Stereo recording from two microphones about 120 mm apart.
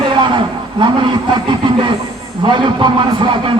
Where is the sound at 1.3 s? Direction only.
40° right (ahead or behind).